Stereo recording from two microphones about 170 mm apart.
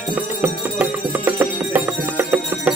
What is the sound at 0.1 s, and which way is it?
Music, 10° right (ahead or behind).